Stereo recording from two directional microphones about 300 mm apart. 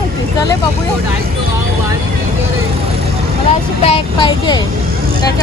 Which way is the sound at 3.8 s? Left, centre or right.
Centre.